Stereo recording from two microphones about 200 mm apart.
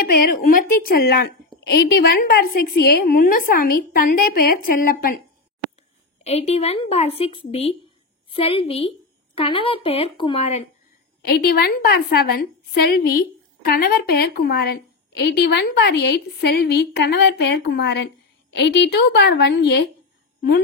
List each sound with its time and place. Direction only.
0.0 s speech: 50° left (ahead or behind)
6.2 s a woman's voice: 30° left (ahead or behind)
11.2 s a woman's voice: 50° left (ahead or behind)